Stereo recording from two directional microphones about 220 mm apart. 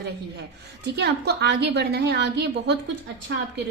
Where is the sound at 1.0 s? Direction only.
50° right (ahead or behind).